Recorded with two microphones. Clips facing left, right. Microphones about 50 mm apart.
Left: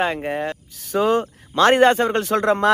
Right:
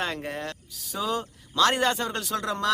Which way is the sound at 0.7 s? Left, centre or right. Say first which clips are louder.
Left 11 dB; left.